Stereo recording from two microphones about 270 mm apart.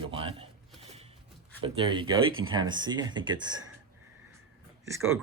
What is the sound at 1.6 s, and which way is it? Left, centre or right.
Speech, centre.